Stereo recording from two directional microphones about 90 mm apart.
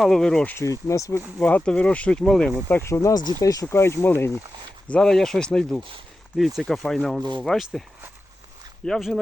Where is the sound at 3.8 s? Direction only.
25° left (ahead or behind).